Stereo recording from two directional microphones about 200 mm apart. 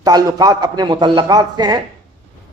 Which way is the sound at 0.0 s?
20° right (ahead or behind).